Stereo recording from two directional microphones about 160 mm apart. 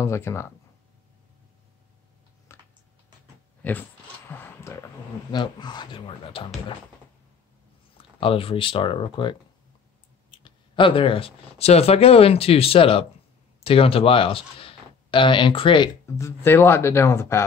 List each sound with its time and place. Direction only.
0.0 s speech: 15° left (ahead or behind)
2.5 s typing: 15° left (ahead or behind)
3.6 s speech: 10° left (ahead or behind)
4.3 s a sound: 15° left (ahead or behind)
5.3 s speech: 25° left (ahead or behind)
8.2 s speech: 35° left (ahead or behind)
10.4 s speech: 35° left (ahead or behind)
16.2 s speech: 15° left (ahead or behind)